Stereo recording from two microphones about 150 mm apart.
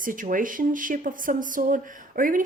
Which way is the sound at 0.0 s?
65° right (ahead or behind).